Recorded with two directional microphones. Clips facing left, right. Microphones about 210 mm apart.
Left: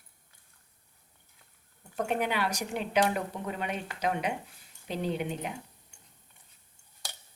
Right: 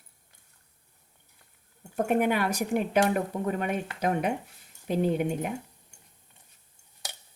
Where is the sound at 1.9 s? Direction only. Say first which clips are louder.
Right 5 dB; 50° right (ahead or behind).